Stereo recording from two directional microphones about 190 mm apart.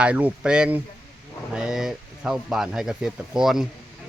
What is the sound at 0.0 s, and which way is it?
Speech, 5° right (ahead or behind).